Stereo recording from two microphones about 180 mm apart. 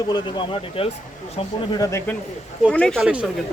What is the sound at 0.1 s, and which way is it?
Speech, 25° left (ahead or behind).